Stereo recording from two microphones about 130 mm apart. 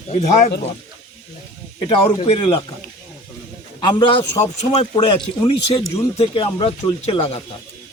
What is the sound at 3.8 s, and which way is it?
Speech, 35° left (ahead or behind).